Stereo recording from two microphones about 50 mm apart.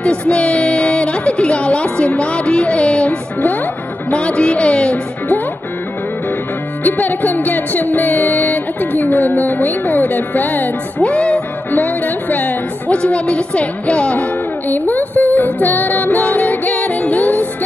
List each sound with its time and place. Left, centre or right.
0.0 s music: left
4.1 s speech: left
6.8 s music: left
11.0 s music: left
11.7 s music: left
12.9 s speech: left
14.7 s music: left